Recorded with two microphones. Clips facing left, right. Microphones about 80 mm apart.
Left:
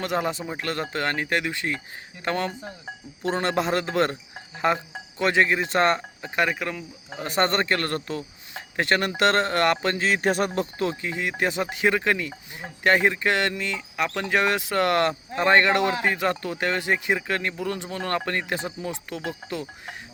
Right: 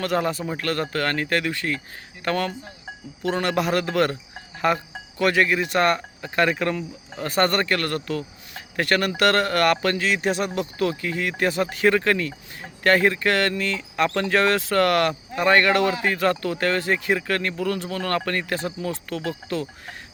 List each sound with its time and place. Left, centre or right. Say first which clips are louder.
0.0 s speech: right 3 dB; centre
6.5 s speech: right 5 dB; centre
7.2 s speech: right 2 dB; left
10.1 s speech: even; left; by 20.0 s centre